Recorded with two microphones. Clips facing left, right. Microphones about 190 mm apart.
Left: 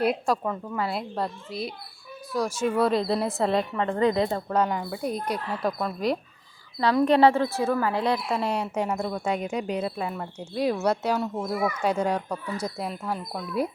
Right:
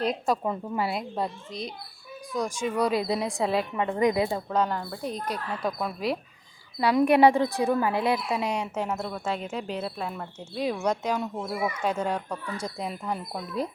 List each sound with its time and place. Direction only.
0.4 s speech: 15° right (ahead or behind)
0.9 s speech: centre (ahead or behind)
4.3 s speech: centre (ahead or behind)
6.7 s speech: 15° right (ahead or behind)
8.3 s speech: centre (ahead or behind)
11.4 s speech: 10° right (ahead or behind)
11.8 s speech: 10° left (ahead or behind)